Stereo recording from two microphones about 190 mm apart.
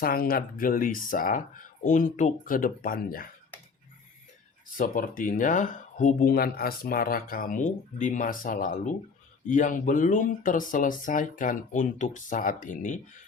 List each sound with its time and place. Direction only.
0.0 s speech: 50° left (ahead or behind)
4.8 s speech: 45° left (ahead or behind)